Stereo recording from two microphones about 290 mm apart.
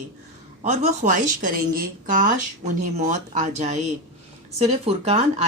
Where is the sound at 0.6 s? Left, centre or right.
Right.